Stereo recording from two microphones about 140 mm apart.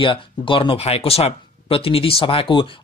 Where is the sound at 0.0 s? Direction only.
35° left (ahead or behind).